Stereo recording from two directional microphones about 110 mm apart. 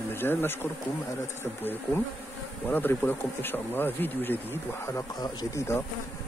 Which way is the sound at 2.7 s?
15° left (ahead or behind).